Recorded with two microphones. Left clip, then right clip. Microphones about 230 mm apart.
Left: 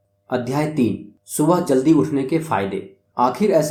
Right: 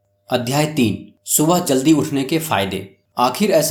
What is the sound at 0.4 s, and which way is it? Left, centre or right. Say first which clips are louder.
Speech: right 1 dB; right.